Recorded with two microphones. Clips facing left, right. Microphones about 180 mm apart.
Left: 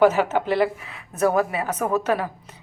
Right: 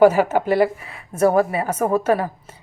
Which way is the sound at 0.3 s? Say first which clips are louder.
Right 3 dB; 45° right (ahead or behind).